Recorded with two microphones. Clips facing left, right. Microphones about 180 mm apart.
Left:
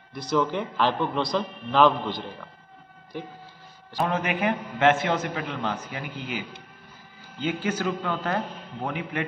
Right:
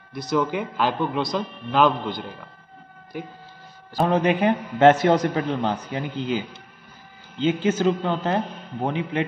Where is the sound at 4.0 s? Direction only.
35° right (ahead or behind).